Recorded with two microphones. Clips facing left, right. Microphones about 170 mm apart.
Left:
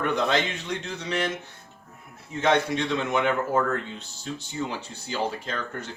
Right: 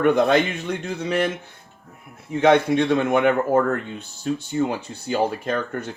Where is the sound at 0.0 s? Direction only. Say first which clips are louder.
Right 7 dB; 55° right (ahead or behind).